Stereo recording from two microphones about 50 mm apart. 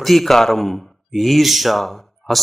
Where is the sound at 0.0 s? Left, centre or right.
Centre.